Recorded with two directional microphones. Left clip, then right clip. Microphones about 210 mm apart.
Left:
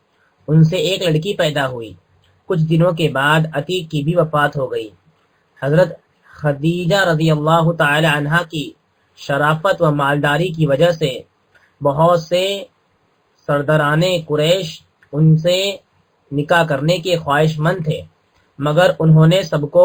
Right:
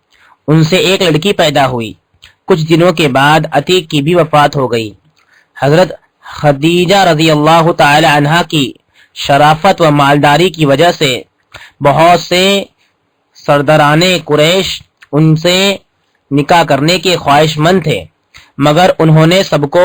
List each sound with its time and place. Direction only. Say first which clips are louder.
0.4 s speech: right 8 dB; 40° right (ahead or behind)
12.3 s speech: right 8 dB; 40° right (ahead or behind)